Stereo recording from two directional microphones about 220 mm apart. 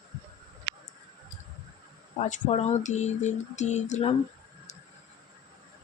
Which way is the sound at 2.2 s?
35° left (ahead or behind).